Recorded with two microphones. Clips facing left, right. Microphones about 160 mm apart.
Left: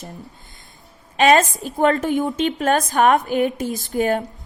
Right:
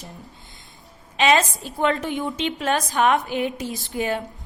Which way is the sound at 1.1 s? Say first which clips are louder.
Left 4 dB; 50° left (ahead or behind).